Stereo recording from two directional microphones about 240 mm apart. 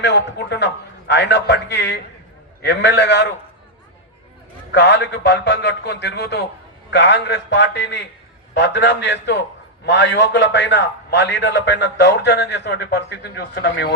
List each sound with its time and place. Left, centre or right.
0.0 s a man's voice: left
4.7 s a man's voice: left